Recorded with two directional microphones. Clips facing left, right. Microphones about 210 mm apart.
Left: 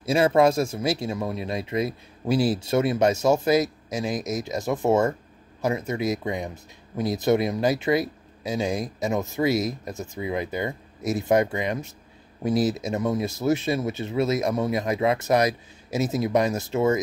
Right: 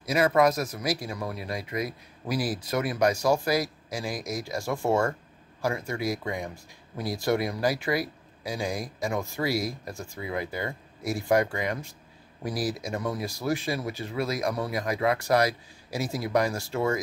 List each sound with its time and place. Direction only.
0.0 s speech: 25° left (ahead or behind)